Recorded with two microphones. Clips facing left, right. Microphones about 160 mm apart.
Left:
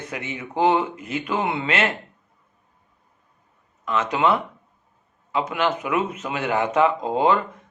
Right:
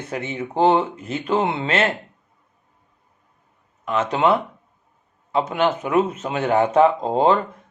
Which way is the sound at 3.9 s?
30° right (ahead or behind).